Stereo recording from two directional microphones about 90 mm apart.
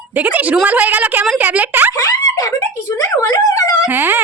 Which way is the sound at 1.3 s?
15° right (ahead or behind).